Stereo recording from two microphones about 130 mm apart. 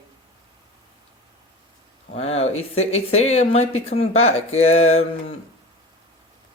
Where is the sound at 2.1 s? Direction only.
55° left (ahead or behind).